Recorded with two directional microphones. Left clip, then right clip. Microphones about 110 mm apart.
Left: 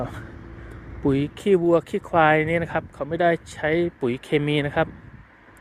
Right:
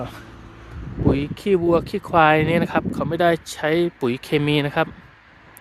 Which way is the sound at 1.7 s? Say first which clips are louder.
Right 1 dB; 55° right (ahead or behind).